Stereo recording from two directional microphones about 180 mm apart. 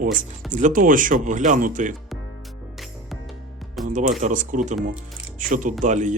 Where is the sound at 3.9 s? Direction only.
45° right (ahead or behind).